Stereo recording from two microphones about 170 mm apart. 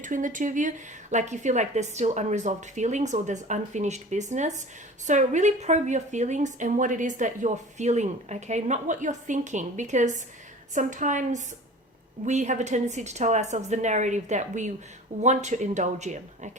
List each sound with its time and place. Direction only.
0.0 s a woman's voice: 50° right (ahead or behind)